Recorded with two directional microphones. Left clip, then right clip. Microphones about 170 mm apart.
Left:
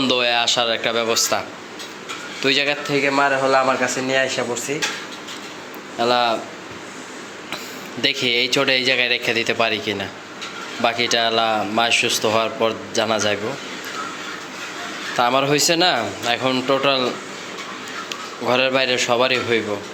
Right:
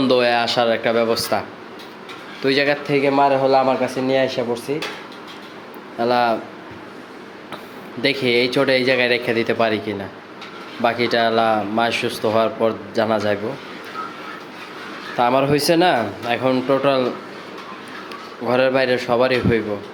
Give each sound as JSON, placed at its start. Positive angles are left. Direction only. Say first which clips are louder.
{"t": 0.0, "sound": "a man's voice", "louder": "right 2 dB", "side_deg": -15}
{"t": 2.8, "sound": "speech", "louder": "right 2 dB", "side_deg": -35}
{"t": 6.0, "sound": "a man's voice", "louder": "even", "side_deg": -20}
{"t": 8.0, "sound": "speech", "louder": "right 1 dB", "side_deg": -15}
{"t": 15.1, "sound": "speech", "louder": "right 1 dB", "side_deg": -15}
{"t": 18.4, "sound": "a man's voice", "louder": "right 1 dB", "side_deg": -20}